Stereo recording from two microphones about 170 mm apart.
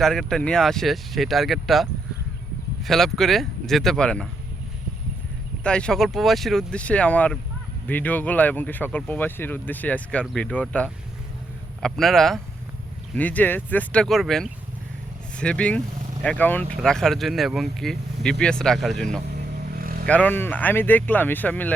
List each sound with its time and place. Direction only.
0.0 s speech: centre (ahead or behind)
5.6 s speech: 5° left (ahead or behind)
19.8 s vehicle: 60° right (ahead or behind)
20.1 s speech: 10° left (ahead or behind)